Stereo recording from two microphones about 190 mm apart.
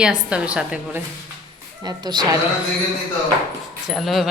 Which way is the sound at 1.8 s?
20° right (ahead or behind).